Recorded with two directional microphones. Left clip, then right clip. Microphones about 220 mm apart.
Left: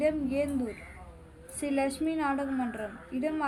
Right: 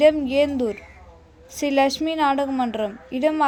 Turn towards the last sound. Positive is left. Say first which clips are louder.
# right 12 dB
turn(degrees=-40)  # may be behind; listen again after turning